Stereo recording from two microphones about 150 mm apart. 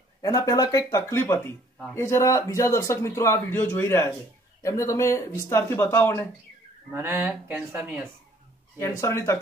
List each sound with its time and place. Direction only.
0.2 s speech: 25° left (ahead or behind)
6.9 s speech: 15° right (ahead or behind)
8.7 s speech: 20° left (ahead or behind)